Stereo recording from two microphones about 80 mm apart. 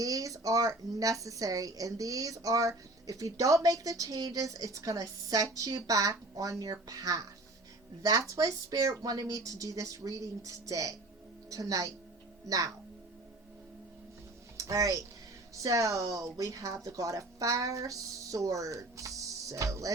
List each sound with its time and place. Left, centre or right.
0.0 s a woman's voice: right
14.6 s a woman's voice: right